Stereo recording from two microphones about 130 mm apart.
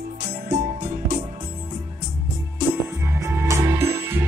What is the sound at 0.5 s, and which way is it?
Music, 65° right (ahead or behind).